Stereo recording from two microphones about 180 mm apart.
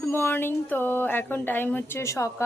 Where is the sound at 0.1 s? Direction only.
10° left (ahead or behind).